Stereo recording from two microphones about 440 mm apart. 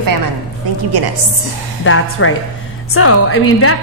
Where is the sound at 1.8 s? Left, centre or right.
Left.